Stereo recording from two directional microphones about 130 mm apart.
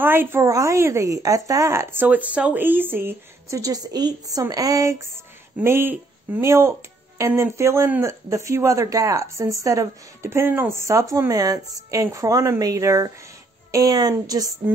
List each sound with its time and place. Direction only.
0.0 s speech: 15° right (ahead or behind)